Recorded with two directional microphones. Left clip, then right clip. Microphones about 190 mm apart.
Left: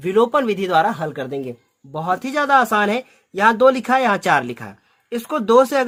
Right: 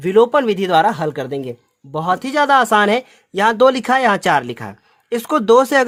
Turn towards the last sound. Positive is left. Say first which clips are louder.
# right 3 dB
turn(degrees=-35)  # may be behind; listen again after turning